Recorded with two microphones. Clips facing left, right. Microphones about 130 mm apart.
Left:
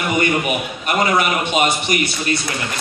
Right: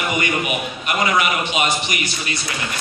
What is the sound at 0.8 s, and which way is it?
A man's voice, 35° left (ahead or behind).